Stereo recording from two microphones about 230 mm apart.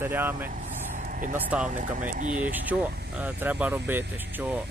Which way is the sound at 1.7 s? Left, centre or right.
Right.